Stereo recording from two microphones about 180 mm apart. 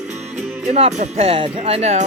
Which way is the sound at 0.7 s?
40° right (ahead or behind).